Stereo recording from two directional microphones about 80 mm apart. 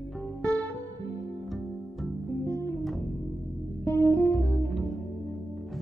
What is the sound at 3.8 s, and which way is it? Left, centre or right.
Music, left.